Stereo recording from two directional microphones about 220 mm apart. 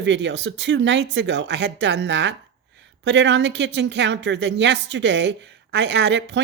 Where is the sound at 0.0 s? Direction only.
55° right (ahead or behind).